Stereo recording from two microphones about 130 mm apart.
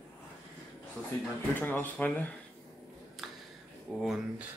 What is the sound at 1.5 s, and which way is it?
Speech, 15° left (ahead or behind).